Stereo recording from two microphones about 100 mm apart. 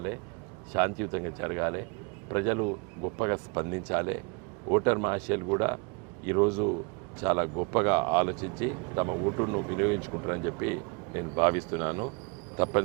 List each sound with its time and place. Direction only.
0.7 s speech: 30° right (ahead or behind)